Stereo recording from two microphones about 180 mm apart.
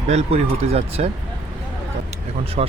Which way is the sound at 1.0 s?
35° right (ahead or behind).